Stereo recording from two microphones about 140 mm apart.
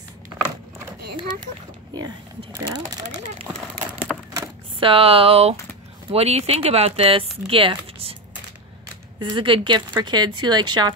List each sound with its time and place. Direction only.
4.7 s speech: 40° right (ahead or behind)
9.2 s speech: 35° right (ahead or behind)